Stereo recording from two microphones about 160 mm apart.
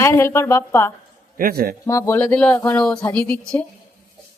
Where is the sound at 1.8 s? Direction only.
15° left (ahead or behind).